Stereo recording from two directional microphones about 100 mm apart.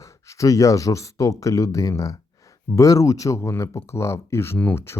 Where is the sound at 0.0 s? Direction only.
30° left (ahead or behind).